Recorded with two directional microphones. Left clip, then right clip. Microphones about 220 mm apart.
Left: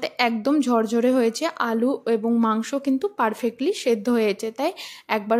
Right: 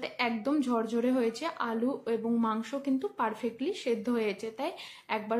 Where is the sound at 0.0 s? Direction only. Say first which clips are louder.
Left 9 dB; 40° left (ahead or behind).